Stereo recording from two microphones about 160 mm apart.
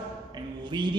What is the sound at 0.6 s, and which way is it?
Speech, 30° right (ahead or behind).